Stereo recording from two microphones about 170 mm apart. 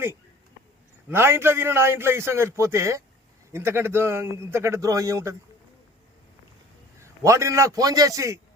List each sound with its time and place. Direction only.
1.1 s a man's voice: 15° right (ahead or behind)
7.0 s a man's voice: 20° right (ahead or behind)